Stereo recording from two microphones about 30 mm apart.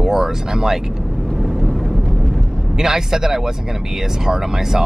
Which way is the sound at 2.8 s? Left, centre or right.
Centre.